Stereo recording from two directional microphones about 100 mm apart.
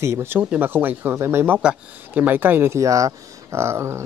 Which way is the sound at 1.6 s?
10° right (ahead or behind).